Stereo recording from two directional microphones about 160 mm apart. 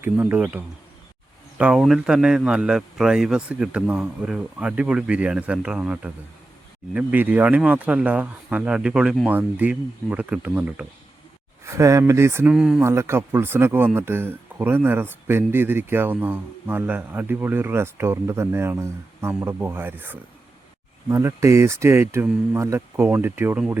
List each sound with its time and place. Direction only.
0.0 s speech: 10° right (ahead or behind)
11.6 s speech: 20° right (ahead or behind)
12.5 s speech: 5° right (ahead or behind)
12.8 s speech: 15° right (ahead or behind)